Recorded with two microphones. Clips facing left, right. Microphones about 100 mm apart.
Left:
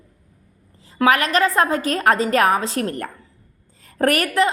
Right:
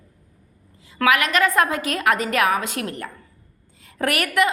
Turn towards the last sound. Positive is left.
turn(degrees=35)  # may be behind; listen again after turning